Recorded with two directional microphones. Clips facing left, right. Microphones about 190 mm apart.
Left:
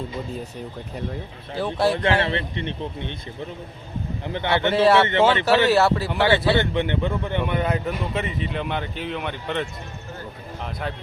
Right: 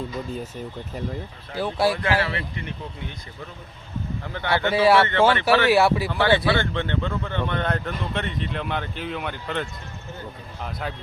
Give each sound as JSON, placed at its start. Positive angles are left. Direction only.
{"t": 1.5, "sound": "a man's voice", "side_deg": -10}
{"t": 2.0, "sound": "speech", "side_deg": 25}
{"t": 4.2, "sound": "speech", "side_deg": 20}
{"t": 4.7, "sound": "a man's voice", "side_deg": -10}
{"t": 5.3, "sound": "speech", "side_deg": 15}
{"t": 5.6, "sound": "a man's voice", "side_deg": -10}
{"t": 6.1, "sound": "speech", "side_deg": 15}